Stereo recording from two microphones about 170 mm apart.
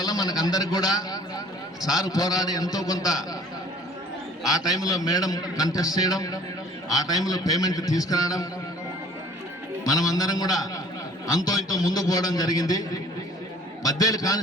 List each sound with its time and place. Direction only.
0.0 s a man's voice: 20° left (ahead or behind)
4.4 s a man's voice: 20° left (ahead or behind)
9.8 s a man's voice: 20° left (ahead or behind)